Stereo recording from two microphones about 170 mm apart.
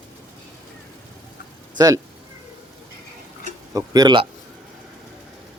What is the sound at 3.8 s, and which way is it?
Speech, 20° right (ahead or behind).